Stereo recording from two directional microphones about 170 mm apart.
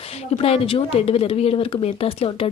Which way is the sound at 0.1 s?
35° left (ahead or behind).